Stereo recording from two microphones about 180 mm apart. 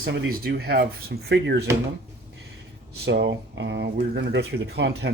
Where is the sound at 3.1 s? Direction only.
70° right (ahead or behind).